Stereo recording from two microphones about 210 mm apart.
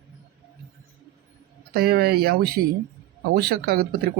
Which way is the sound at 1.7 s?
50° right (ahead or behind).